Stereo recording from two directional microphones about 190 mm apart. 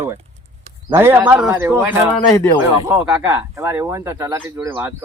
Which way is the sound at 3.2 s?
15° right (ahead or behind).